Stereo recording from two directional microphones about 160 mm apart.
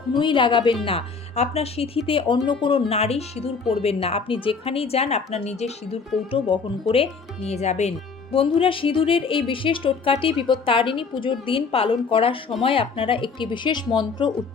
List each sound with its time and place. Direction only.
0.2 s speech: 30° left (ahead or behind)